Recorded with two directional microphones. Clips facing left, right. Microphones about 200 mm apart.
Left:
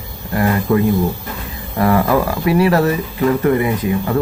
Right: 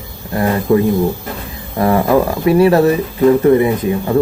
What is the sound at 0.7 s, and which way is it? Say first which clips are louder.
Speech: right 4 dB; 15° right (ahead or behind).